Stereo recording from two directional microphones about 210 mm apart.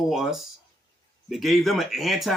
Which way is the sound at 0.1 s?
Centre (ahead or behind).